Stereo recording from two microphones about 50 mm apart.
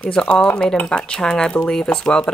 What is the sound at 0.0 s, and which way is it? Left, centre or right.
Speech, left.